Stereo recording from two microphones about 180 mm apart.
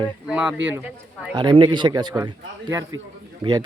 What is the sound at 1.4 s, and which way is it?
A man's voice, 25° right (ahead or behind).